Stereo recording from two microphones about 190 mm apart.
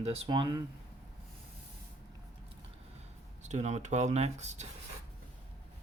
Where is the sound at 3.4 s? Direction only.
40° right (ahead or behind).